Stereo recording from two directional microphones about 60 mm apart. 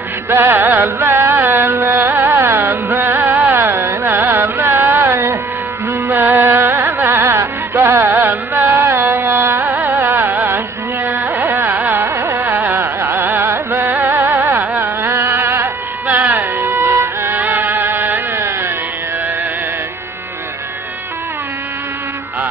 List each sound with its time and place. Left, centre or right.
0.3 s music: right
3.4 s carnatic music: right
5.9 s music: right
7.7 s carnatic music: right
10.1 s music: right
11.1 s carnatic music: right
14.3 s a sound: right
14.8 s music: right